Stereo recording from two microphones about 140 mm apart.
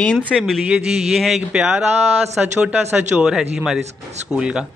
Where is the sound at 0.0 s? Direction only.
10° left (ahead or behind).